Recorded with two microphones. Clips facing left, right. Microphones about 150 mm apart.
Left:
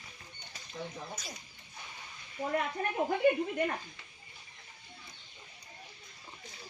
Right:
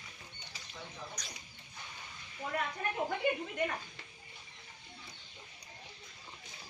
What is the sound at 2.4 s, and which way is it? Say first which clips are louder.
Speech: left 6 dB; 45° left (ahead or behind).